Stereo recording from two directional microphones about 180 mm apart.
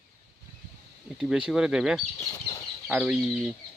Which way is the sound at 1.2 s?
5° right (ahead or behind).